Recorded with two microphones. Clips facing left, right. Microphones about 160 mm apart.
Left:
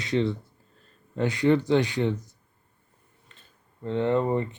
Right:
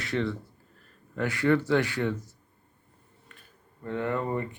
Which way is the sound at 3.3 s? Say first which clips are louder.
Right 3 dB; 25° left (ahead or behind).